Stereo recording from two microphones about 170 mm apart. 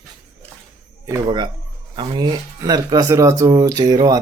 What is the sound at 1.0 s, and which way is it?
Speech, 25° right (ahead or behind).